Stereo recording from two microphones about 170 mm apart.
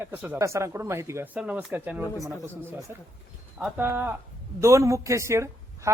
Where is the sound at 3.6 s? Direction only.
10° right (ahead or behind).